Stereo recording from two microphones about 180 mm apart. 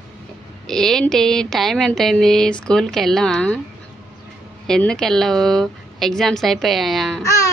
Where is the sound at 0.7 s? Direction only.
Centre (ahead or behind).